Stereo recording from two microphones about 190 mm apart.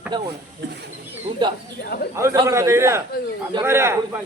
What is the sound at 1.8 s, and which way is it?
Speech, 55° left (ahead or behind).